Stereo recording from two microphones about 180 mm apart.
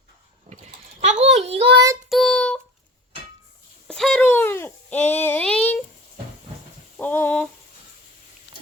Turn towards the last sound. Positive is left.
turn(degrees=10)  # may be behind; listen again after turning